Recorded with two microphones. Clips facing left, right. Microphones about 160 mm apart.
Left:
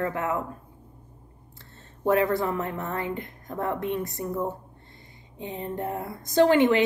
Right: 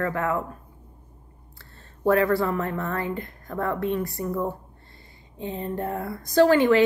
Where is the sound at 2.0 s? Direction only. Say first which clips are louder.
Right 2 dB; 20° left (ahead or behind).